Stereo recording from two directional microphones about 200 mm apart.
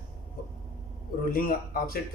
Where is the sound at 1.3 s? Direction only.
45° left (ahead or behind).